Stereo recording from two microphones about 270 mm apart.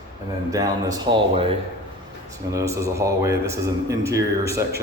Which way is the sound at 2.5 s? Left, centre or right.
Centre.